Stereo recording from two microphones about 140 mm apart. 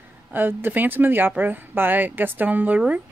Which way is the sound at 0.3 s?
15° right (ahead or behind).